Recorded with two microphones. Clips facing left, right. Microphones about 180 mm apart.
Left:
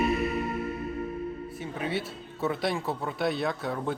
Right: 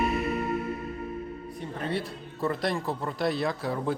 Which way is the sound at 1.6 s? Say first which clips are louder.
Right 1 dB; 5° left (ahead or behind).